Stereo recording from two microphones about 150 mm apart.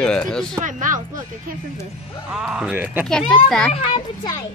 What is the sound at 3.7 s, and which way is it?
Speech, 45° left (ahead or behind).